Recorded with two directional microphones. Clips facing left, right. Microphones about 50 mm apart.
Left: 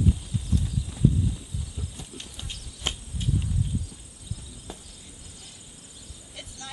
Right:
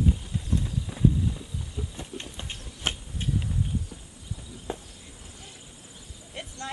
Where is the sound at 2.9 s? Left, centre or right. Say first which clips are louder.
Right 1 dB; right.